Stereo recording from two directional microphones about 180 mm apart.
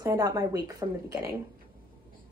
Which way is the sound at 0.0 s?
20° right (ahead or behind).